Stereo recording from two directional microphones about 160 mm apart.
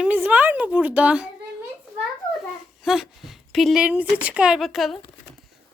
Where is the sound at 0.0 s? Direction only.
10° right (ahead or behind).